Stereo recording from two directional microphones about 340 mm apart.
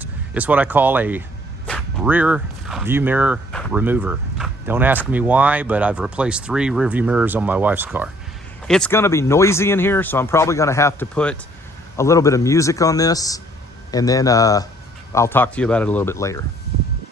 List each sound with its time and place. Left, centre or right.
0.0 s speech: centre